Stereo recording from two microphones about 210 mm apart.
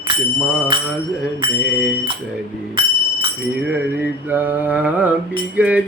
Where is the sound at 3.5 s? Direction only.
5° right (ahead or behind).